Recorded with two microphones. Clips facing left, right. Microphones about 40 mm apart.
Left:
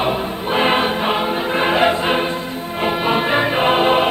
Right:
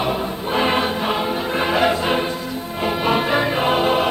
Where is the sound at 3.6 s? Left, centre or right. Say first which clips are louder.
Left 5 dB; left.